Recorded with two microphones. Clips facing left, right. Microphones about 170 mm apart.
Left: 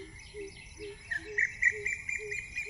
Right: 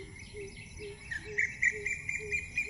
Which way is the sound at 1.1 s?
55° left (ahead or behind).